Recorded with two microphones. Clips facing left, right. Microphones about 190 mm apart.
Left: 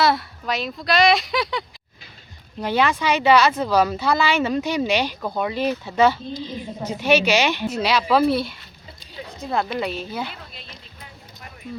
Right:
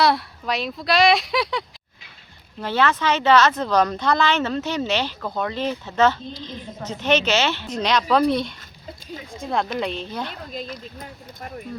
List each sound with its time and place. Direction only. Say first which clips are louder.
0.0 s speech: even; centre (ahead or behind)
2.6 s speech: left 1 dB; 15° left (ahead or behind)
9.7 s speech: even; 5° left (ahead or behind)
10.5 s speech: right 12 dB; 45° right (ahead or behind)